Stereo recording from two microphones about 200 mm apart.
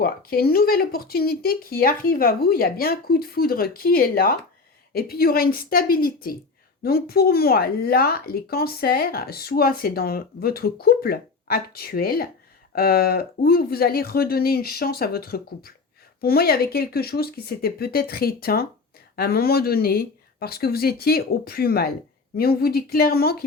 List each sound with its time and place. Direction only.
0.0 s speech: 50° left (ahead or behind)